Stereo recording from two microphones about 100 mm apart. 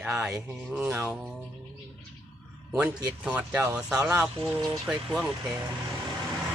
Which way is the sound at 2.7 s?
10° right (ahead or behind).